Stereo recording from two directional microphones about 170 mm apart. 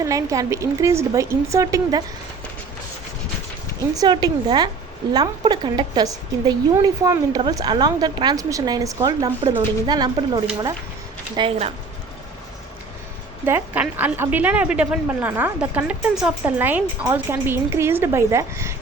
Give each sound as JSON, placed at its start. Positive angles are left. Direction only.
{"t": 0.0, "sound": "a woman's voice", "side_deg": -20}
{"t": 4.0, "sound": "a woman's voice", "side_deg": -25}
{"t": 13.4, "sound": "a woman's voice", "side_deg": -10}